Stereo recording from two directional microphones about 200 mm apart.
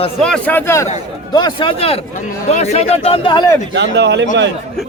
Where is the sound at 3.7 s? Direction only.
60° right (ahead or behind).